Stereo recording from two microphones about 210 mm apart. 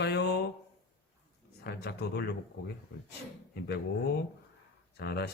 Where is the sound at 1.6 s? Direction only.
50° left (ahead or behind).